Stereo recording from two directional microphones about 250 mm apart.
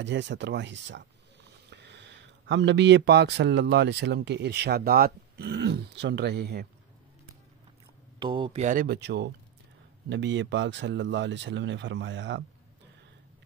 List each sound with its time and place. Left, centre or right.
0.0 s speech: right
8.2 s speech: centre; by 12.4 s right